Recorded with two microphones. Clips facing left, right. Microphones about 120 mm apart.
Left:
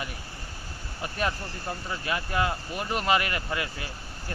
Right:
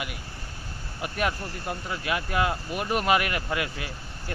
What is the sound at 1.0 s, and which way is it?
Speech, 15° right (ahead or behind).